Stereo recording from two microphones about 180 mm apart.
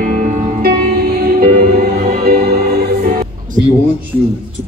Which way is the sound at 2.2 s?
60° right (ahead or behind).